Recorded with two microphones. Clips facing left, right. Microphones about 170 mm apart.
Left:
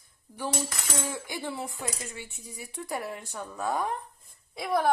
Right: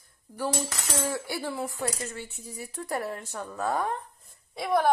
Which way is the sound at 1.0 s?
15° left (ahead or behind).